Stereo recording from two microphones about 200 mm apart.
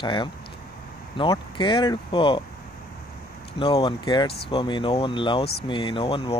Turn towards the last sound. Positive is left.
turn(degrees=25)  # may be behind; listen again after turning